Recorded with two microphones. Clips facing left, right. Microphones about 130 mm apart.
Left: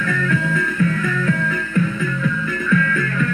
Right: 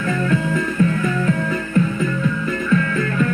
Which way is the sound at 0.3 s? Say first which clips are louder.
Right 1 dB; 25° right (ahead or behind).